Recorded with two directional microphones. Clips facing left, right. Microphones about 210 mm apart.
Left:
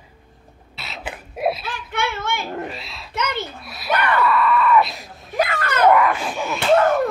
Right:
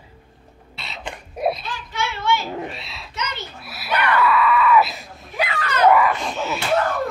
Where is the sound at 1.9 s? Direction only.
55° left (ahead or behind).